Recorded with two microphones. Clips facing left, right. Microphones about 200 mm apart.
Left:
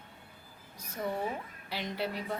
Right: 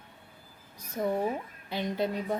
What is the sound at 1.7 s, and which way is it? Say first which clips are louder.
Speech: right 5 dB; 20° right (ahead or behind).